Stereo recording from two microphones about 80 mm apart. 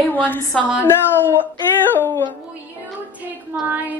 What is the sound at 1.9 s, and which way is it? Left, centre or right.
Speech, left.